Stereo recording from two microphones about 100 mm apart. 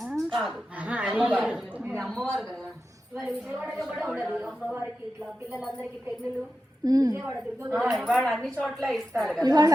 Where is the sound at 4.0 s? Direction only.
5° right (ahead or behind).